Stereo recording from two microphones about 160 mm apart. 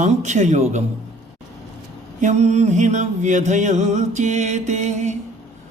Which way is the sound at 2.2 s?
45° right (ahead or behind).